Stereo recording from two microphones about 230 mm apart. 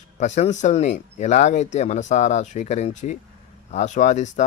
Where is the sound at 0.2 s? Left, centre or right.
Left.